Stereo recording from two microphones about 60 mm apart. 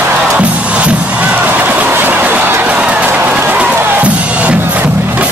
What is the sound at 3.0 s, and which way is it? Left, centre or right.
Music, right.